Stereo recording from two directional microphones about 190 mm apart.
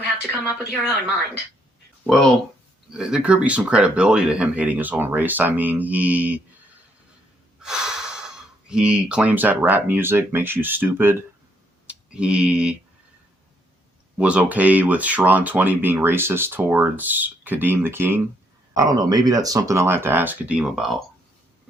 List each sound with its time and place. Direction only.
2.0 s speech: centre (ahead or behind)
7.6 s gasp: 5° right (ahead or behind)
8.6 s speech: 5° right (ahead or behind)
14.2 s speech: 5° right (ahead or behind)